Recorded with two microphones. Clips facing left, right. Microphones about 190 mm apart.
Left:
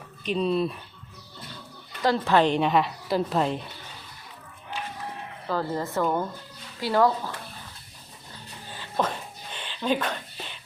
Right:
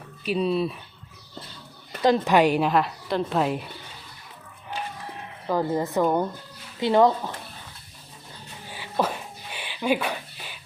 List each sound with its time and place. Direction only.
0.3 s a woman's voice: 5° right (ahead or behind)
2.0 s a woman's voice: 20° right (ahead or behind); by 3.6 s 5° right (ahead or behind)
5.5 s speech: 15° right (ahead or behind)
8.7 s a sound: 10° right (ahead or behind)